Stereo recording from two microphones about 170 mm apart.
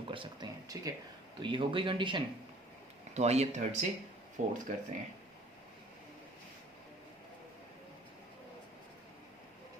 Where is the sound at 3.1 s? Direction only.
40° right (ahead or behind).